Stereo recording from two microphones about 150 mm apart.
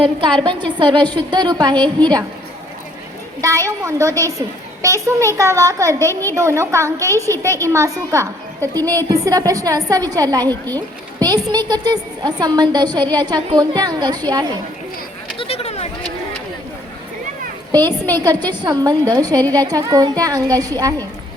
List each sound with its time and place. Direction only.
0.2 s a woman's voice: 35° right (ahead or behind)
3.4 s a woman's voice: 20° right (ahead or behind)
10.8 s a sound: 25° right (ahead or behind)
11.7 s a woman's voice: 25° right (ahead or behind)
15.4 s a sound: 40° left (ahead or behind)
17.8 s a woman's voice: 15° left (ahead or behind)
18.3 s a woman's voice: 30° right (ahead or behind)